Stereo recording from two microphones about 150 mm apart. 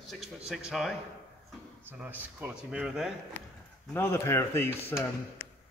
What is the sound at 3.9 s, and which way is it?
Speech, 15° left (ahead or behind).